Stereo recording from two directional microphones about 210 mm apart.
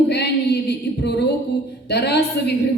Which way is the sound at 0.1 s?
50° left (ahead or behind).